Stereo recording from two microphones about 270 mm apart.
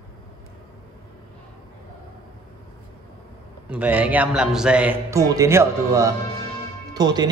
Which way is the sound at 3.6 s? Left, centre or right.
Centre.